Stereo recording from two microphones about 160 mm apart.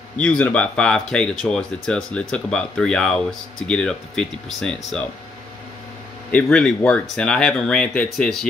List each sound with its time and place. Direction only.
0.2 s speech: 10° left (ahead or behind)
6.3 s speech: 5° left (ahead or behind)